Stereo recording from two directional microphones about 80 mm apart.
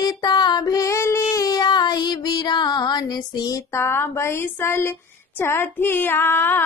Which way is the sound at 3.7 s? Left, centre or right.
Left.